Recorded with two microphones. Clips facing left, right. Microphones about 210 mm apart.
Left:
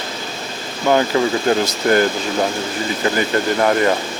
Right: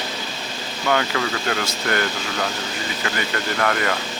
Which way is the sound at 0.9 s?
30° left (ahead or behind).